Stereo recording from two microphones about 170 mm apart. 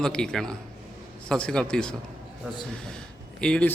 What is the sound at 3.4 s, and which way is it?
Speech, 5° left (ahead or behind).